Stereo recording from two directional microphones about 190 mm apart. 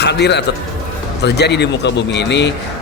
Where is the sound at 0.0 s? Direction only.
60° left (ahead or behind).